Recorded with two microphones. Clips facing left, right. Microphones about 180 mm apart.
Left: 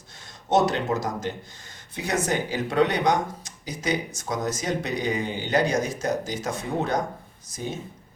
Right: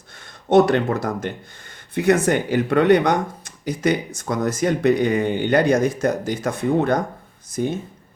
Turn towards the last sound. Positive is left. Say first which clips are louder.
# right 9 dB
turn(degrees=-55)  # may be behind; listen again after turning